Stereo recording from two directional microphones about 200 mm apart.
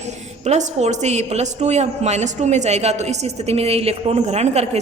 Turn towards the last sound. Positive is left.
turn(degrees=-35)  # may be behind; listen again after turning